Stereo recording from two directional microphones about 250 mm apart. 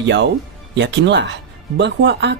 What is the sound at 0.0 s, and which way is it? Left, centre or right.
Speech, right.